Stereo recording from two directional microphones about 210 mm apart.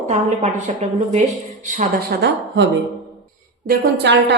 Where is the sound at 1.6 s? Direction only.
35° right (ahead or behind).